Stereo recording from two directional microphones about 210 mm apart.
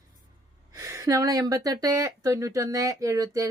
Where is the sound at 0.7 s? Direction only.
15° right (ahead or behind).